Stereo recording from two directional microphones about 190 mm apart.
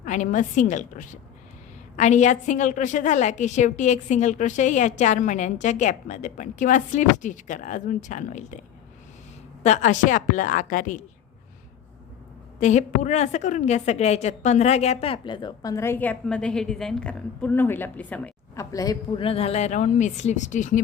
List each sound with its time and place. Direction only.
0.0 s a woman's voice: 40° left (ahead or behind)
9.6 s a woman's voice: 40° left (ahead or behind)
12.5 s a woman's voice: 40° left (ahead or behind)